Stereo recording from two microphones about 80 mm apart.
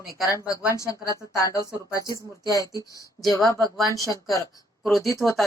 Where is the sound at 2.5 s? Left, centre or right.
Left.